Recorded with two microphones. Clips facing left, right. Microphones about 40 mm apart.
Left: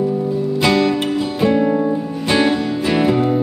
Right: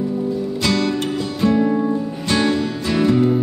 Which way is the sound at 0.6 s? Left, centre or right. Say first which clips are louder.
Left 5 dB; centre.